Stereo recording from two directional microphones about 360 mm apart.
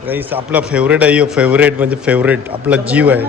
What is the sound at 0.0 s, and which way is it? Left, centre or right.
A man's voice, centre.